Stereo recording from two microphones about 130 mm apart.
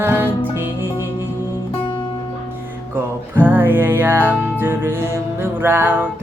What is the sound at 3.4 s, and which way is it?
Music, 15° right (ahead or behind).